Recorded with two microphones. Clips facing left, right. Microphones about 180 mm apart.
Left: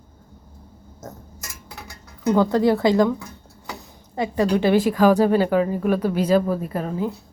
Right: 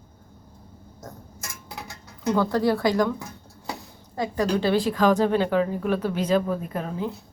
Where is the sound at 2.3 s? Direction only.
20° left (ahead or behind).